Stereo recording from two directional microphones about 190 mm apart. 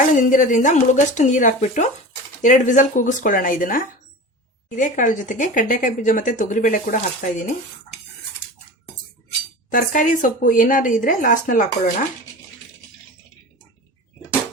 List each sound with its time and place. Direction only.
0.1 s a woman's voice: 40° left (ahead or behind)
9.6 s a woman's voice: 45° left (ahead or behind)